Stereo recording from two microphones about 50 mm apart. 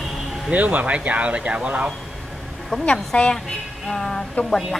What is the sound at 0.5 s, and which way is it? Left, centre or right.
Speech, right.